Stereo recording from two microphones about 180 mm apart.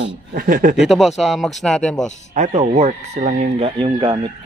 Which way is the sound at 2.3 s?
40° right (ahead or behind).